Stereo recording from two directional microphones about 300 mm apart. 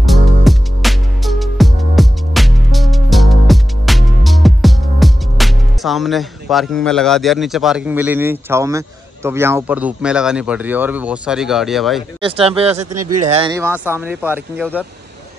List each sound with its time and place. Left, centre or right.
0.0 s music: centre
12.2 s speech: centre